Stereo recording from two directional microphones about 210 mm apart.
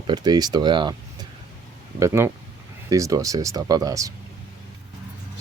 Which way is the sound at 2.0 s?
10° right (ahead or behind).